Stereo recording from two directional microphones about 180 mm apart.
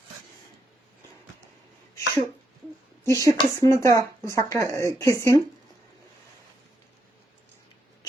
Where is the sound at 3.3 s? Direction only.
15° left (ahead or behind).